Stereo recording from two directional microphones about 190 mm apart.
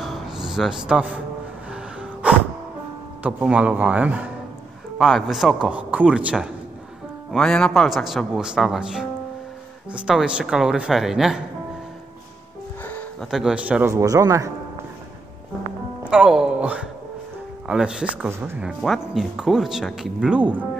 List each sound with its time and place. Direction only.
0.0 s a sound: centre (ahead or behind)
1.7 s music: 5° right (ahead or behind)
3.2 s speech: 5° right (ahead or behind)
12.8 s music: 10° left (ahead or behind)
13.3 s speech: 5° right (ahead or behind)
16.0 s speech: 5° right (ahead or behind)